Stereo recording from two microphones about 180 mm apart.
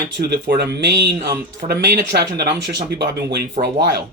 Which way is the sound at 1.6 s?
65° right (ahead or behind).